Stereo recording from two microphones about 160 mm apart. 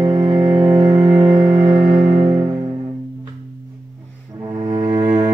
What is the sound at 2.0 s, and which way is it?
Music, 25° right (ahead or behind).